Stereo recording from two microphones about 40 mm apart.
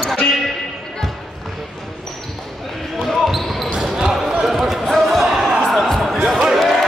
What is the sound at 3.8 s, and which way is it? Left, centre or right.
Basketball bounce, centre.